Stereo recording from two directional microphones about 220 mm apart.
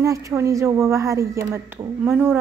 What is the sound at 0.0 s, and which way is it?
A woman's voice, 15° right (ahead or behind).